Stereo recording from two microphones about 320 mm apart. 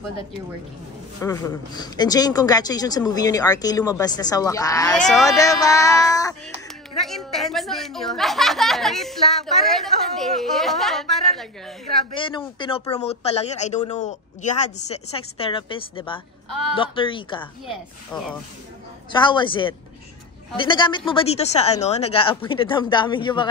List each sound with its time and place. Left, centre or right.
1.2 s speech: centre
7.0 s a sound: centre
12.1 s speech: centre
16.4 s speech: right
16.7 s speech: centre
17.6 s speech: centre
19.1 s speech: centre